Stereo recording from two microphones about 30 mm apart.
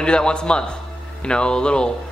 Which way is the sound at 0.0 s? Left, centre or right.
Left.